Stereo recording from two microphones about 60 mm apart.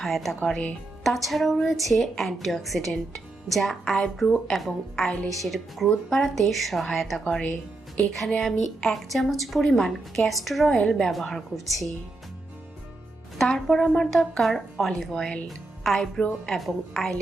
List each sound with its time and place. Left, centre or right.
0.0 s a woman's voice: centre
0.4 s speech: centre
1.0 s a woman's voice: centre
7.3 s speech: centre
8.4 s a woman's voice: centre
13.4 s a woman's voice: centre
15.4 s music: centre
16.5 s a woman's voice: centre